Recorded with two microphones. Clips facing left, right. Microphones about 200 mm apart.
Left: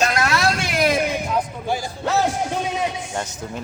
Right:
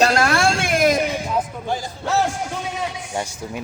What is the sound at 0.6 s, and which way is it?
Speech, 50° right (ahead or behind).